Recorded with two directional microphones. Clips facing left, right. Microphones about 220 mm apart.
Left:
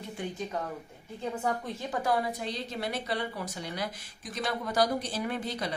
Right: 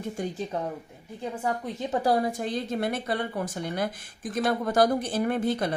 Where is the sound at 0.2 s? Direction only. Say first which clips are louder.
Right 4 dB; 45° right (ahead or behind).